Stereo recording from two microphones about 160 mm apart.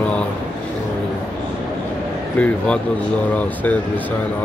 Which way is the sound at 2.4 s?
5° left (ahead or behind).